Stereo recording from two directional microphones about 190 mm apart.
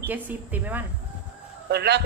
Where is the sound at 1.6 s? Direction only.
60° right (ahead or behind).